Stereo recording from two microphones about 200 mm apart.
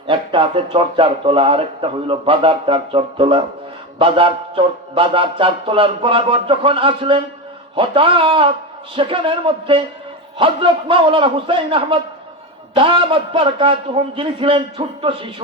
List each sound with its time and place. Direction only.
0.1 s speech: 25° right (ahead or behind)